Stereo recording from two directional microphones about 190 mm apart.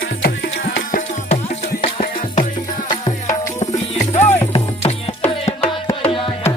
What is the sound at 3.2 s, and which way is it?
Music, 35° left (ahead or behind).